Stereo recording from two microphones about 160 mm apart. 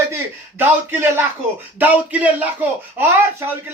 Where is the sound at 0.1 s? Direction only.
15° right (ahead or behind).